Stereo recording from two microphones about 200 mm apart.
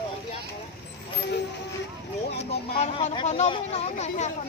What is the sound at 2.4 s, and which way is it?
Speech, 30° left (ahead or behind).